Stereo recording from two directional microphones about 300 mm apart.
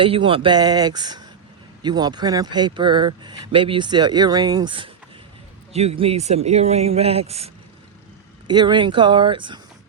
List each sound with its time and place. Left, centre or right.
0.0 s speech: centre